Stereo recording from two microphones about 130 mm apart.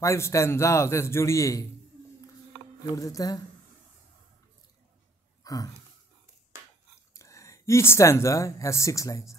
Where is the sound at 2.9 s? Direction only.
25° left (ahead or behind).